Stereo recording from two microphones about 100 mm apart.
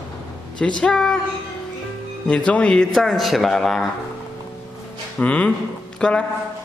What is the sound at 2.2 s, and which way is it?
A man's voice, 10° left (ahead or behind).